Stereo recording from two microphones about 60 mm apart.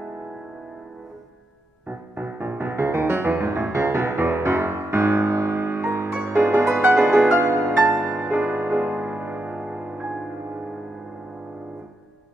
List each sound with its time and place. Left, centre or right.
1.9 s music: right
3.4 s music: right
6.3 s music: right
7.3 s music: right
8.1 s music: right